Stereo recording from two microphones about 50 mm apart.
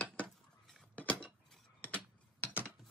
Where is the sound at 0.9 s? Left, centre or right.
Left.